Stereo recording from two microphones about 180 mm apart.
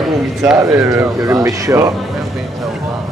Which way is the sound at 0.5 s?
15° right (ahead or behind).